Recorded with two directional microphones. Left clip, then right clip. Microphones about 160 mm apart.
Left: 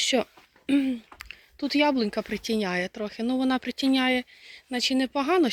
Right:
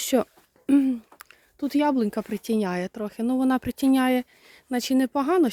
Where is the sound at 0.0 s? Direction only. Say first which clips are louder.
Right 1 dB; 40° right (ahead or behind).